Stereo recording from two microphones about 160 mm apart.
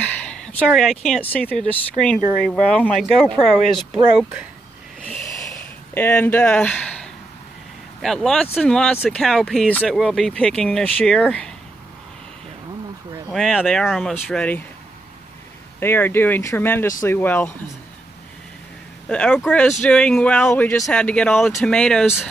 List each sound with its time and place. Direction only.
0.0 s a sound: 5° left (ahead or behind)
0.7 s speech: centre (ahead or behind)
5.0 s a sound: 10° left (ahead or behind)
8.0 s speech: centre (ahead or behind)
13.3 s speech: centre (ahead or behind)
15.8 s speech: 15° left (ahead or behind)
19.0 s speech: 5° left (ahead or behind)
20.9 s speech: 5° left (ahead or behind)